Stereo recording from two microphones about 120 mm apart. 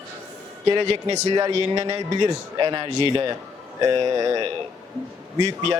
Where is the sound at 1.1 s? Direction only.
35° right (ahead or behind).